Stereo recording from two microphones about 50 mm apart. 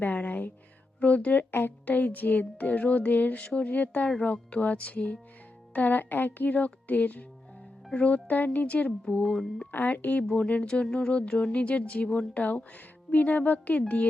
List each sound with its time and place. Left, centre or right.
0.2 s music: left
0.9 s speech: left
1.5 s speech: left
1.8 s speech: left
9.2 s a sound: centre
9.7 s speech: left
10.8 s a sound: centre
11.2 s speech: left